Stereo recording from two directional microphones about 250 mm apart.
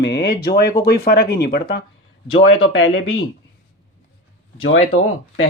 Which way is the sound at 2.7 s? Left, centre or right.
Left.